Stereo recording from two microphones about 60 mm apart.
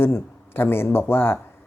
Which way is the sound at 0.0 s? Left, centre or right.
Left.